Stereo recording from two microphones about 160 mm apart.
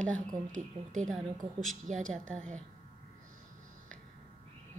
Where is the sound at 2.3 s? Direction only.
5° left (ahead or behind).